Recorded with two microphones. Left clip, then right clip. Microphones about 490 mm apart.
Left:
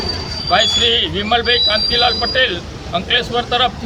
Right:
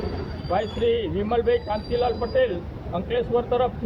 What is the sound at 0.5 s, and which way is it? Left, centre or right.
A man's voice, right.